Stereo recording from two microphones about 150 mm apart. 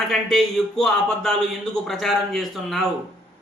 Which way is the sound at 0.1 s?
Centre (ahead or behind).